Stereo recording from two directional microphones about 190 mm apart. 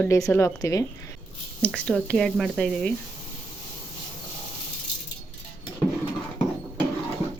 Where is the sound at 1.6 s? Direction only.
5° left (ahead or behind).